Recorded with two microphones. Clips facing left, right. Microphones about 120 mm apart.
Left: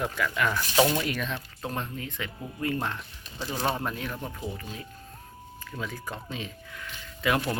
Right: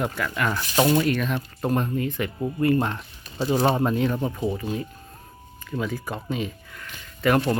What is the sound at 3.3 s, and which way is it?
Speech, 35° right (ahead or behind).